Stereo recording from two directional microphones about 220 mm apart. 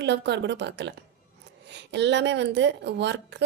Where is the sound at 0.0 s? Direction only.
50° right (ahead or behind).